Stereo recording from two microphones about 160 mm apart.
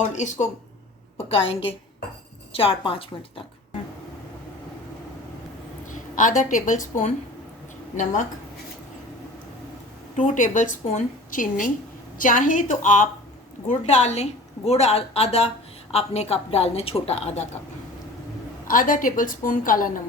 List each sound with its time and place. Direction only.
0.1 s a woman's voice: 50° left (ahead or behind)
1.3 s a woman's voice: 35° left (ahead or behind)
5.9 s a woman's voice: 55° left (ahead or behind)
10.2 s a woman's voice: 55° left (ahead or behind)
18.7 s a woman's voice: 55° left (ahead or behind)